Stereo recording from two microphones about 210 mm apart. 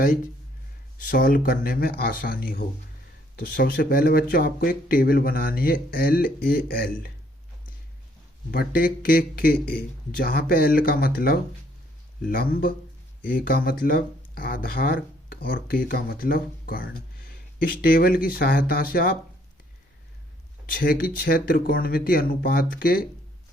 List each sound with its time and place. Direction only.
0.9 s speech: 40° left (ahead or behind)
8.4 s speech: 45° left (ahead or behind)
20.7 s speech: 45° left (ahead or behind)